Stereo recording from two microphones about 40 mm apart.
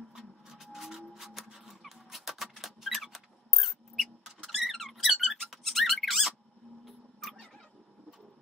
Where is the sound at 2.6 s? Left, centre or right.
Centre.